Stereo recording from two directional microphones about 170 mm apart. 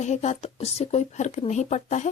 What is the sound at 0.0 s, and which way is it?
Speech, 45° left (ahead or behind).